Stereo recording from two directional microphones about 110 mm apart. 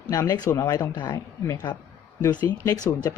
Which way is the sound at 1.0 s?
40° left (ahead or behind).